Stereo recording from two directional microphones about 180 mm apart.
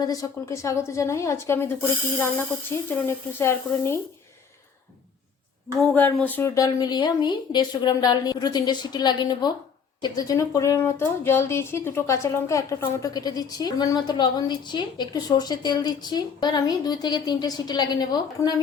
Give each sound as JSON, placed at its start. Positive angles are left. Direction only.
{"t": 0.0, "sound": "a woman's voice", "side_deg": 20}
{"t": 5.8, "sound": "speech", "side_deg": 10}